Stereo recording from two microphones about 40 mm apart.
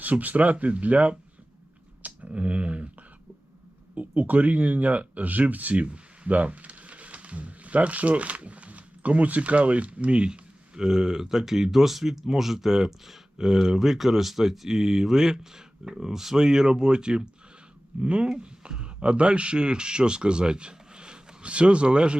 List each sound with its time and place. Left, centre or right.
0.0 s speech: right
2.0 s a sound: right
3.9 s speech: right
5.8 s speech: right